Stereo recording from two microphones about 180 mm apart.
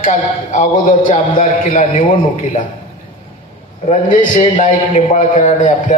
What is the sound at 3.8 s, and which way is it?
A man's voice, 45° left (ahead or behind).